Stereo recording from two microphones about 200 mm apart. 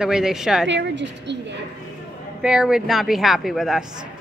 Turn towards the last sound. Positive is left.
turn(degrees=0)  # may be behind; listen again after turning